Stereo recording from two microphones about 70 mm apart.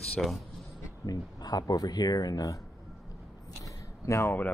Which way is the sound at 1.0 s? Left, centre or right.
Left.